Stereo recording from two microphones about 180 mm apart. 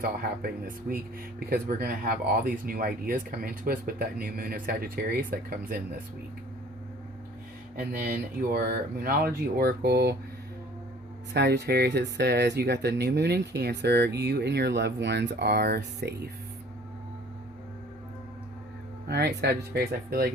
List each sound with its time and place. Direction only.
0.0 s speech: 55° right (ahead or behind)
7.8 s speech: 55° right (ahead or behind)
11.3 s speech: 70° right (ahead or behind)
19.0 s speech: 65° right (ahead or behind)